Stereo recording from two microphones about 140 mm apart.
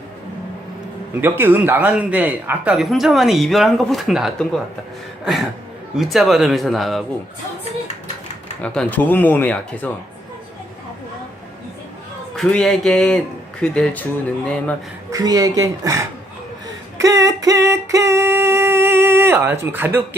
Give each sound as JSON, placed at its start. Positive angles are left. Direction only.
{"t": 1.2, "sound": "speech", "side_deg": -15}
{"t": 6.0, "sound": "speech", "side_deg": 0}
{"t": 8.6, "sound": "speech", "side_deg": 5}
{"t": 12.4, "sound": "speech", "side_deg": 5}
{"t": 15.1, "sound": "a woman's voice", "side_deg": -25}
{"t": 17.0, "sound": "singing", "side_deg": -20}